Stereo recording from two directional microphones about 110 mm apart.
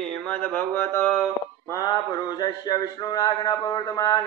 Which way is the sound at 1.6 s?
30° left (ahead or behind).